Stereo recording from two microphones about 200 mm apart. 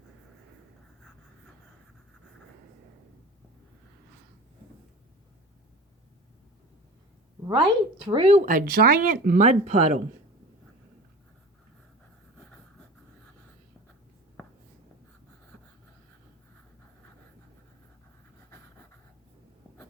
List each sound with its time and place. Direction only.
7.4 s a woman's voice: 25° right (ahead or behind)
8.4 s speech: 45° right (ahead or behind)